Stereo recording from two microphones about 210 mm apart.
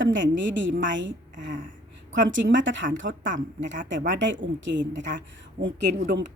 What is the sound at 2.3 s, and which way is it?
A woman's voice, 60° right (ahead or behind).